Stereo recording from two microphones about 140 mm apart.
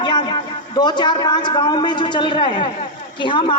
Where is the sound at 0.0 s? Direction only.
30° left (ahead or behind).